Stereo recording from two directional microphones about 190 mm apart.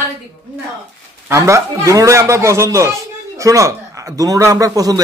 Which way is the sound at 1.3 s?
15° right (ahead or behind).